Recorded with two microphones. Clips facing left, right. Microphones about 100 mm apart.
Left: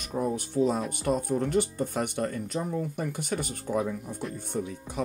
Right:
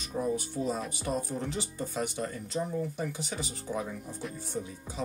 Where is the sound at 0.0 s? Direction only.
50° left (ahead or behind).